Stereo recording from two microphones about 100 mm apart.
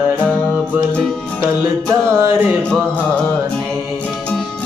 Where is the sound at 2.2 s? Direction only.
30° right (ahead or behind).